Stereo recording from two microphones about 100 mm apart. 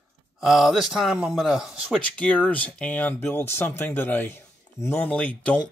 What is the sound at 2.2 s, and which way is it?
Speech, 15° left (ahead or behind).